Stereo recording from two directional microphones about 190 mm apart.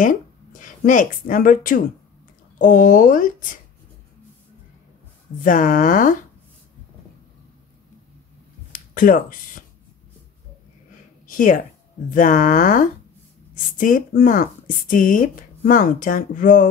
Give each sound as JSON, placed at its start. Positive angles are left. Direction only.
{"t": 0.0, "sound": "speech", "side_deg": 45}
{"t": 5.4, "sound": "speech", "side_deg": 45}
{"t": 8.7, "sound": "speech", "side_deg": 45}
{"t": 11.2, "sound": "speech", "side_deg": 45}